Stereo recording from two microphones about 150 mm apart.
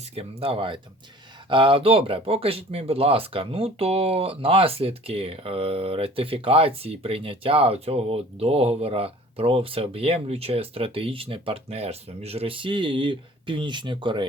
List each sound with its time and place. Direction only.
0.2 s speech: 40° right (ahead or behind)